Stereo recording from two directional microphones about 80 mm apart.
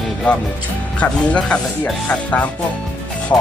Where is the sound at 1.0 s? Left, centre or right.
Centre.